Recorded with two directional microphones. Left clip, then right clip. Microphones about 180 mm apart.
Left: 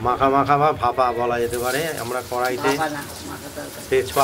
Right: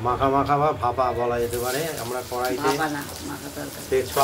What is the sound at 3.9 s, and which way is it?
Speech, 30° left (ahead or behind).